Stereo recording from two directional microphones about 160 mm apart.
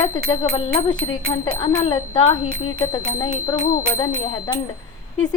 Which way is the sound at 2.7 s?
20° left (ahead or behind).